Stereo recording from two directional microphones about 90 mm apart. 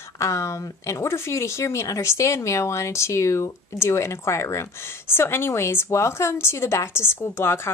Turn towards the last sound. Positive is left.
turn(degrees=30)  # may be behind; listen again after turning